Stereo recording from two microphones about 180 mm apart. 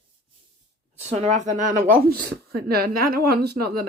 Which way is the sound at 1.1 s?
40° right (ahead or behind).